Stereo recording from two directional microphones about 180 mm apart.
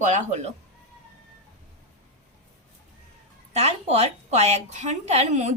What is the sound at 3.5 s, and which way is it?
A woman's voice, 35° right (ahead or behind).